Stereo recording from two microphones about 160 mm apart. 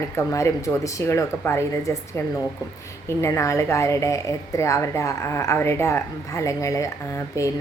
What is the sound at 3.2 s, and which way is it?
Speech, 20° left (ahead or behind).